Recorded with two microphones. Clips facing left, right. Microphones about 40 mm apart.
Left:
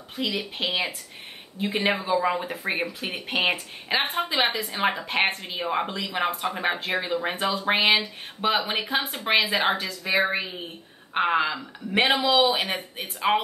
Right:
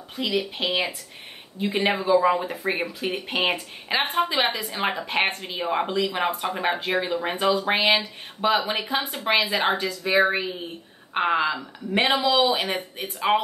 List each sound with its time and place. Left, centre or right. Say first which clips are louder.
0.1 s speech: right 3 dB; centre